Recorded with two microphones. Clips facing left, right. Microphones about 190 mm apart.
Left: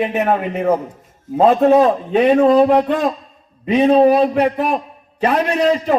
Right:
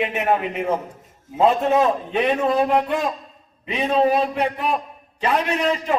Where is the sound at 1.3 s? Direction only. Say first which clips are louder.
Left 6 dB; 35° left (ahead or behind).